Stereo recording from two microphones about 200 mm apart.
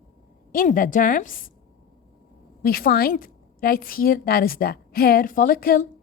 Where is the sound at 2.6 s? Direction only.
45° left (ahead or behind).